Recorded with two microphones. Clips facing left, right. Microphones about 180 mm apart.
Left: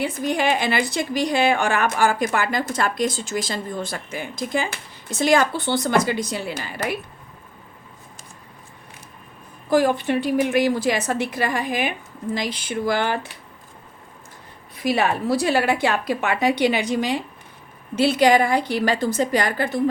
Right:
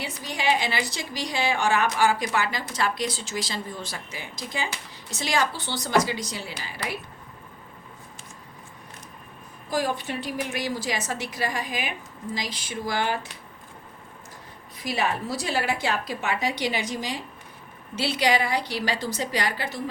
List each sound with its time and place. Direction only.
0.0 s a woman's voice: 55° left (ahead or behind)
9.6 s a woman's voice: 55° left (ahead or behind)
14.8 s a woman's voice: 60° left (ahead or behind)
17.9 s a woman's voice: 50° left (ahead or behind)